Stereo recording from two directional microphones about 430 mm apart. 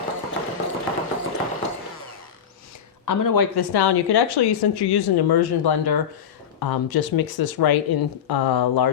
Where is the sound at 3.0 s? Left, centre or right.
Left.